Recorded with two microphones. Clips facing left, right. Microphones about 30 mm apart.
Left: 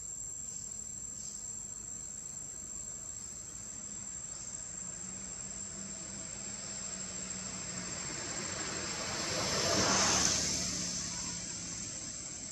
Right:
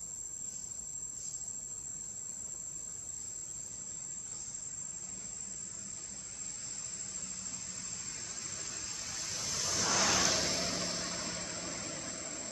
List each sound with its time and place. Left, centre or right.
4.8 s vehicle: centre
9.8 s vehicle: centre; by 12.4 s right